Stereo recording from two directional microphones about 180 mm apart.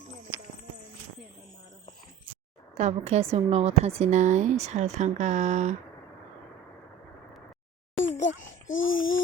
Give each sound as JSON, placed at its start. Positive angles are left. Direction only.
{"t": 2.7, "sound": "a woman's voice", "side_deg": -35}
{"t": 8.2, "sound": "a child's voice", "side_deg": 90}